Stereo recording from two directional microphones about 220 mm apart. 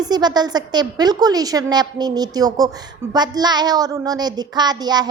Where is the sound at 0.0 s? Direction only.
20° right (ahead or behind).